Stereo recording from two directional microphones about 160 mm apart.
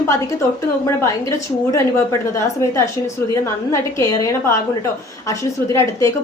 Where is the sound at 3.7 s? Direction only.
20° left (ahead or behind).